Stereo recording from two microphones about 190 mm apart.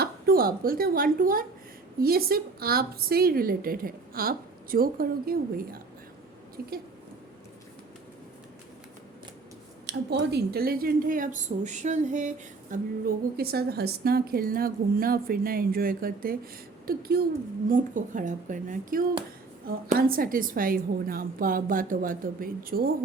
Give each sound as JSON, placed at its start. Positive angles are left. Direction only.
{"t": 0.0, "sound": "a woman's voice", "side_deg": -50}
{"t": 9.8, "sound": "a woman's voice", "side_deg": -60}
{"t": 12.7, "sound": "a woman's voice", "side_deg": -50}